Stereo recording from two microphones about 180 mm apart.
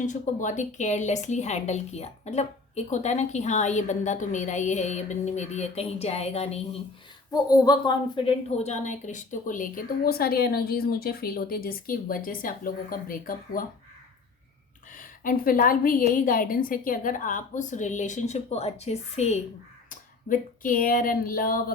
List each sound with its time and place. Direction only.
0.0 s a woman's voice: 45° left (ahead or behind)
7.3 s a woman's voice: 20° left (ahead or behind); by 13.7 s 50° left (ahead or behind)
14.9 s a woman's voice: 50° left (ahead or behind)
19.9 s speech: 50° left (ahead or behind)